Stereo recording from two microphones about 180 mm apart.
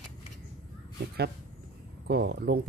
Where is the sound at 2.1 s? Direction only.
60° right (ahead or behind).